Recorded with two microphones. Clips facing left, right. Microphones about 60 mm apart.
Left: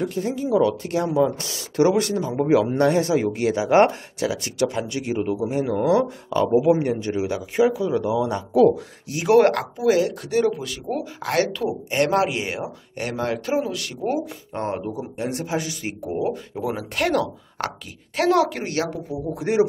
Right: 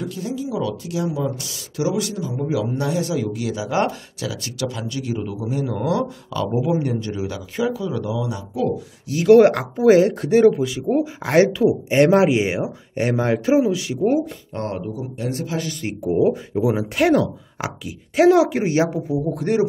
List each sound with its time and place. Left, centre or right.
0.0 s speech: left
9.8 s speech: right; by 14.1 s centre
14.5 s speech: left
15.6 s speech: centre
16.0 s speech: centre
19.2 s speech: centre